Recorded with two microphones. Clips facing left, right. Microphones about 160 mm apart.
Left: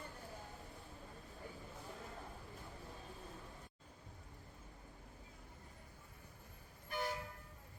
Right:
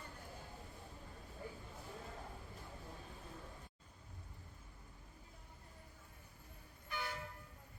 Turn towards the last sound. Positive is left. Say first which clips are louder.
# left 4 dB
turn(degrees=40)  # may be behind; listen again after turning